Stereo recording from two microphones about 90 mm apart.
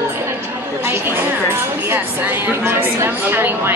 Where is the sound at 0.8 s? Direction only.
25° right (ahead or behind).